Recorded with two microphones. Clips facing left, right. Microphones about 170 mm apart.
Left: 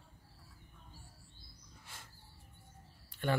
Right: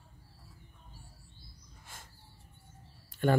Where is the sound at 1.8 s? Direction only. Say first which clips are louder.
Right 3 dB; 45° right (ahead or behind).